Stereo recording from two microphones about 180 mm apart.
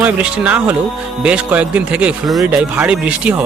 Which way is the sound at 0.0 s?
5° right (ahead or behind).